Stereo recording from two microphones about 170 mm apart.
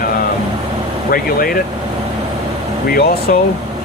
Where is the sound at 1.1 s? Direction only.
60° left (ahead or behind).